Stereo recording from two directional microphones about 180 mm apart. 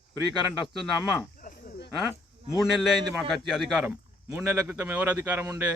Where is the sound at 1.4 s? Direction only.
50° left (ahead or behind).